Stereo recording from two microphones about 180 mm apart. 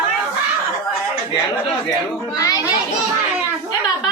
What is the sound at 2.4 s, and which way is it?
Children playing, 20° left (ahead or behind).